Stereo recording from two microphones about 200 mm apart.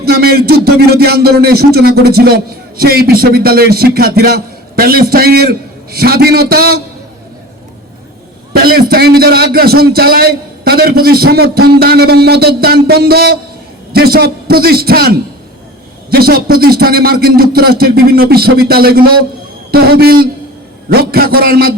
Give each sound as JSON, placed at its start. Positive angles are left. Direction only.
{"t": 0.0, "sound": "a man's voice", "side_deg": -50}
{"t": 8.6, "sound": "a man's voice", "side_deg": -50}